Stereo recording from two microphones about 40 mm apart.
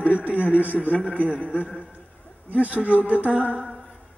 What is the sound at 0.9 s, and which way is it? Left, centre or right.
Speech, left.